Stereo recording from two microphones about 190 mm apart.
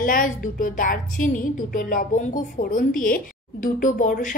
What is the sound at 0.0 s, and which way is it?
A woman's voice, 45° left (ahead or behind).